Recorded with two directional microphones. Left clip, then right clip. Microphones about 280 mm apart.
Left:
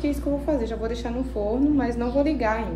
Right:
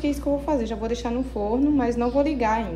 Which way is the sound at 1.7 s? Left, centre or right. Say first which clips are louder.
Right 2 dB; right.